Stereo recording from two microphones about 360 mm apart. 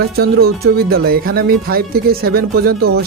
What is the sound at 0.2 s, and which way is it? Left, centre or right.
Speech, right.